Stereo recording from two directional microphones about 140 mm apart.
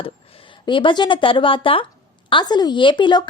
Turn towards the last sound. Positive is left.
turn(degrees=30)  # may be behind; listen again after turning